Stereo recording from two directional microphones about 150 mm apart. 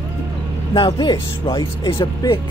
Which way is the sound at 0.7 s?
30° left (ahead or behind).